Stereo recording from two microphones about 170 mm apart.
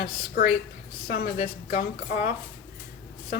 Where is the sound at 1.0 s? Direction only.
65° left (ahead or behind).